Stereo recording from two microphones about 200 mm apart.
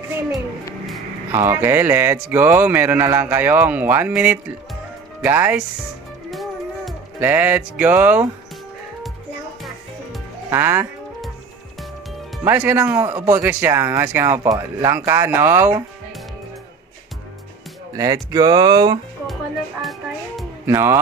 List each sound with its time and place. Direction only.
1.3 s speech: 10° right (ahead or behind)
6.3 s music: centre (ahead or behind)
7.2 s speech: 10° right (ahead or behind)
10.5 s speech: 15° right (ahead or behind)
12.4 s speech: 10° right (ahead or behind)
17.9 s speech: 15° right (ahead or behind)
19.8 s music: centre (ahead or behind)
20.6 s speech: 15° right (ahead or behind)